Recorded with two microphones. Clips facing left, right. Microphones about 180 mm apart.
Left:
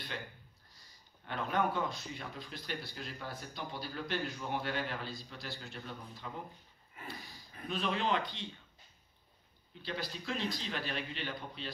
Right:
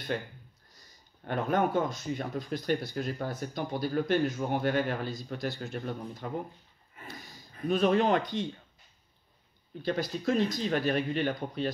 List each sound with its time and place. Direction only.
0.1 s speech: 45° right (ahead or behind)
7.6 s speech: 45° right (ahead or behind)
9.8 s speech: 45° right (ahead or behind)